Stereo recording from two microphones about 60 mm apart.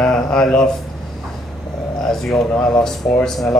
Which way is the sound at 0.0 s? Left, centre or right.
Centre.